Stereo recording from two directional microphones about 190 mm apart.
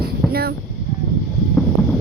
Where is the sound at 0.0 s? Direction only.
55° right (ahead or behind).